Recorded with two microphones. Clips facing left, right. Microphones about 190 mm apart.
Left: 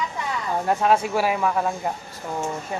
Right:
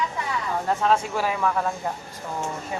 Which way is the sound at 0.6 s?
10° left (ahead or behind).